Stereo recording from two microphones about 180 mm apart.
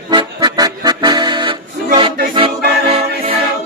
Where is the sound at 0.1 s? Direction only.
25° right (ahead or behind).